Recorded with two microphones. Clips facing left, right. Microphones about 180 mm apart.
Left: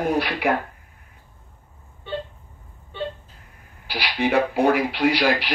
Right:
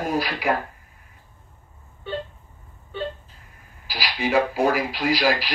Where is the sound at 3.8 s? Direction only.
60° left (ahead or behind).